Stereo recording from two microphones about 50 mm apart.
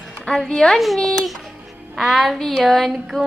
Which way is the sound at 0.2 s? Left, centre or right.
Centre.